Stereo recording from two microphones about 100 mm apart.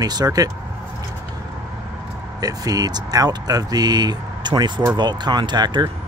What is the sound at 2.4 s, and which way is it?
Speech, 40° right (ahead or behind).